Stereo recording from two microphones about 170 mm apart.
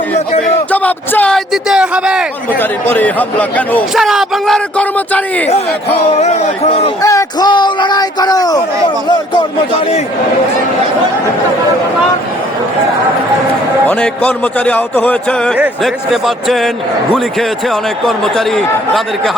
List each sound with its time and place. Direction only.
0.4 s a sound: 10° left (ahead or behind)
1.6 s speech: 5° right (ahead or behind)
2.5 s speech: 10° left (ahead or behind)
3.9 s speech: centre (ahead or behind)
6.1 s speech: 40° left (ahead or behind)
7.0 s a man's voice: 20° left (ahead or behind)
13.8 s speech: 10° left (ahead or behind)
15.5 s speech: 5° right (ahead or behind)
18.0 s speech: centre (ahead or behind)